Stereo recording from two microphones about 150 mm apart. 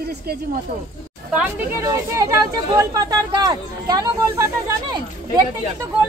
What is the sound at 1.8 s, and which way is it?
Speech, 20° right (ahead or behind).